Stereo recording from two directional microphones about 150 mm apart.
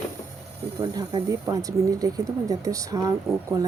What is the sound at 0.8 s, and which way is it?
Speech, 25° right (ahead or behind).